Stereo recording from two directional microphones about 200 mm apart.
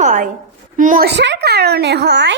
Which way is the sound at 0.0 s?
40° right (ahead or behind).